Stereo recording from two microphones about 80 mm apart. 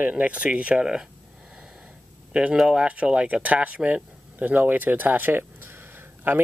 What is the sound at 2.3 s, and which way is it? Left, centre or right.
Speech, centre.